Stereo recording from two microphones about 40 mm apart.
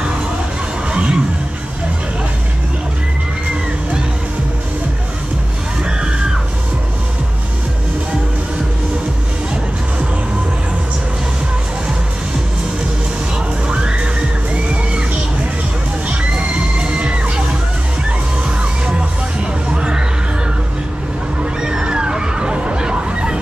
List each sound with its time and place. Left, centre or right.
0.9 s music: right
5.9 s music: right
13.7 s music: right
16.1 s children shouting: right
18.6 s music: right
21.5 s a sound: centre